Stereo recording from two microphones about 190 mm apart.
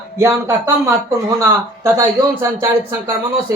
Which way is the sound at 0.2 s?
15° right (ahead or behind).